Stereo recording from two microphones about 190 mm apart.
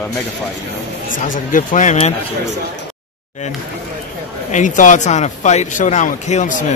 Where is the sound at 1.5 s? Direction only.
40° left (ahead or behind).